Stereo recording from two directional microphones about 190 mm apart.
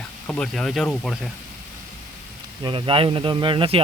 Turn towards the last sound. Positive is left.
turn(degrees=-30)  # may be behind; listen again after turning